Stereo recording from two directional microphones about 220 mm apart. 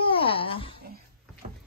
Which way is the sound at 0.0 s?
25° left (ahead or behind).